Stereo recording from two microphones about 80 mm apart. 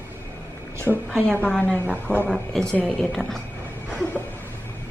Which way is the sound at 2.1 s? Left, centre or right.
Left.